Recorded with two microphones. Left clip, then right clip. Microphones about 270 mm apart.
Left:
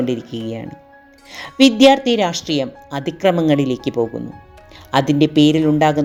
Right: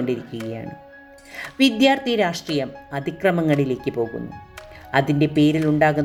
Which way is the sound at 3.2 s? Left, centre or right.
Centre.